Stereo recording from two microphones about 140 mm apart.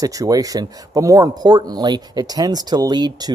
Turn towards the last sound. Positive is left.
turn(degrees=-30)  # may be behind; listen again after turning